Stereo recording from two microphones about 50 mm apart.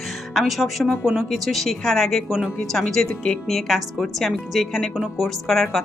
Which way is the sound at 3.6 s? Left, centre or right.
Centre.